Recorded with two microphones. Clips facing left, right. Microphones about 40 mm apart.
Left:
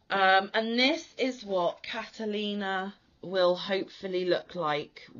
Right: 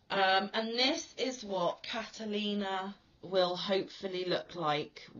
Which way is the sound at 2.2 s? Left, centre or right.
Left.